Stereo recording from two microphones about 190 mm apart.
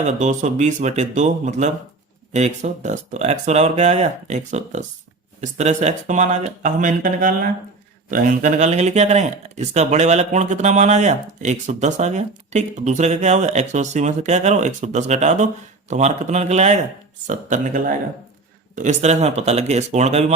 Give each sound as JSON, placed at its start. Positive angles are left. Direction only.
{"t": 0.0, "sound": "speech", "side_deg": -40}